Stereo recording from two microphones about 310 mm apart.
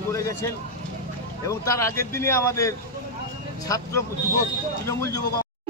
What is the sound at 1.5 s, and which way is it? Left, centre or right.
Speech, centre.